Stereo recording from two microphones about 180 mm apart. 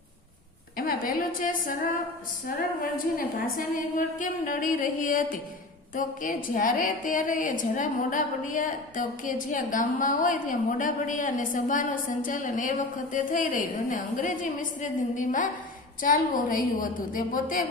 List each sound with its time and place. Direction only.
0.8 s a woman's voice: 50° left (ahead or behind)
2.8 s a woman's voice: 50° left (ahead or behind)